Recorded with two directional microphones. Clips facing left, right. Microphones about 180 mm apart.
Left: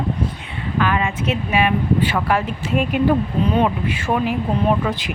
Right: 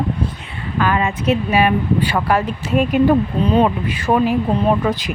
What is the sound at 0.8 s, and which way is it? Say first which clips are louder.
Speech: right 2 dB; 40° right (ahead or behind).